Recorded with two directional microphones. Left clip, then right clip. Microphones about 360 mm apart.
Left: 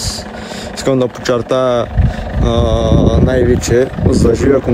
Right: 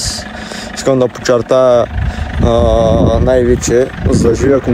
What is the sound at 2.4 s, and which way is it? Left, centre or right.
Speech, centre.